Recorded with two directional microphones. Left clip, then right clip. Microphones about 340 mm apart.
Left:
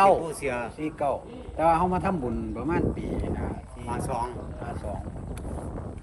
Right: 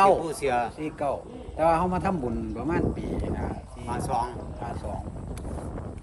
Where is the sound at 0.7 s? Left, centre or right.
Centre.